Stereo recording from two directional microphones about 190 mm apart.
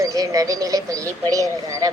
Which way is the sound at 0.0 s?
15° right (ahead or behind).